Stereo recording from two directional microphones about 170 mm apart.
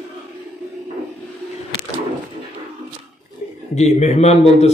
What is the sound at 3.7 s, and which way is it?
Speech, 40° left (ahead or behind).